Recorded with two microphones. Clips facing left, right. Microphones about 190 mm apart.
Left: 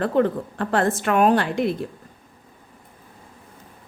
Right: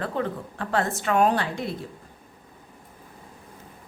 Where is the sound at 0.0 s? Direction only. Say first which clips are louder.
Left 8 dB; 60° left (ahead or behind).